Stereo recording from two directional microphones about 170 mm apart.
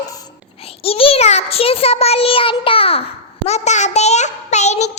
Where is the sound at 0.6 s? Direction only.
35° left (ahead or behind).